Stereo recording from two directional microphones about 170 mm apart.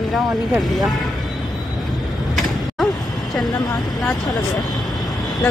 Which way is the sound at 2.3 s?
Centre (ahead or behind).